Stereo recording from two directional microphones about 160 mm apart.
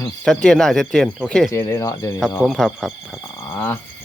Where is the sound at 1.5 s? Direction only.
15° left (ahead or behind).